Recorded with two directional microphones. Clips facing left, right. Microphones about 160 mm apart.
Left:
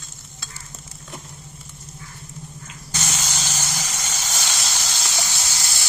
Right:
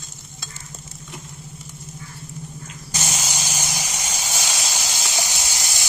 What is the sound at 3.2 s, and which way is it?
Vehicle, 10° right (ahead or behind).